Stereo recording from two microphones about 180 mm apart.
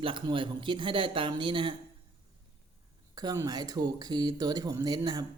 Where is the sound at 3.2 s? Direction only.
20° right (ahead or behind).